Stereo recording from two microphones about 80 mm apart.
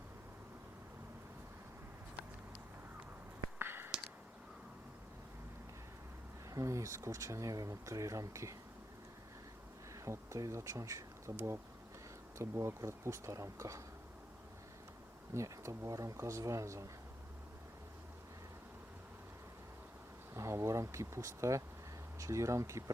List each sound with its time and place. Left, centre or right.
3.6 s a sound: right
6.5 s speech: right
9.9 s speech: right
12.4 s speech: right
15.3 s speech: right
20.3 s speech: right